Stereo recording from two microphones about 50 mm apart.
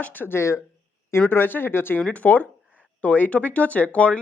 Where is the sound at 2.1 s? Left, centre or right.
Left.